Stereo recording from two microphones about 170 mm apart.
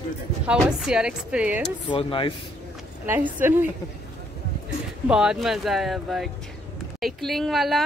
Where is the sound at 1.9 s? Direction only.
30° left (ahead or behind).